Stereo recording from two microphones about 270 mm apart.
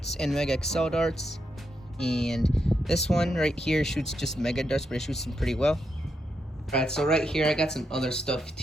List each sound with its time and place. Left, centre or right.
0.1 s speech: centre